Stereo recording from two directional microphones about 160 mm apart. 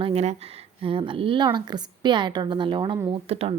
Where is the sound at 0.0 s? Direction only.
40° right (ahead or behind).